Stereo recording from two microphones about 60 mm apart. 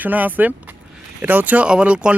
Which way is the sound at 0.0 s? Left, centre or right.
Right.